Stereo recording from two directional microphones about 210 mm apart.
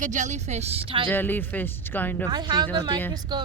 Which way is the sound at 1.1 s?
10° left (ahead or behind).